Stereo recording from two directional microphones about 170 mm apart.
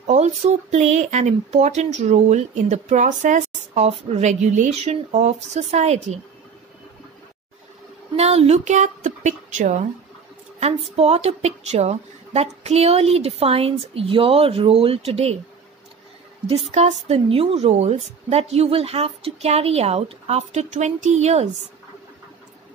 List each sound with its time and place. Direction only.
0.0 s speech: 40° right (ahead or behind)
8.2 s a woman's voice: 40° right (ahead or behind)
16.7 s speech: 40° right (ahead or behind)